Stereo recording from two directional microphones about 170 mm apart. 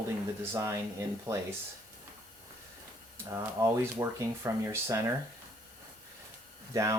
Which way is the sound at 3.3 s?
20° right (ahead or behind).